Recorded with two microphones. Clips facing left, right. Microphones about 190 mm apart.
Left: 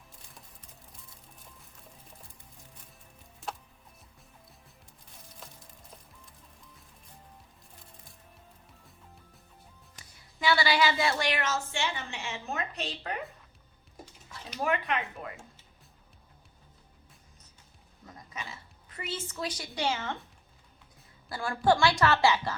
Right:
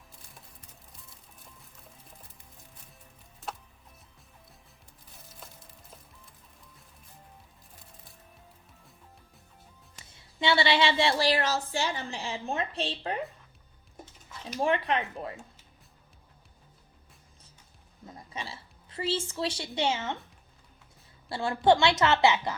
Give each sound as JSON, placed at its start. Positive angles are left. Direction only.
{"t": 10.0, "sound": "a woman's voice", "side_deg": -25}
{"t": 14.6, "sound": "a woman's voice", "side_deg": -30}
{"t": 18.0, "sound": "a sound", "side_deg": -25}
{"t": 21.2, "sound": "a woman's voice", "side_deg": -25}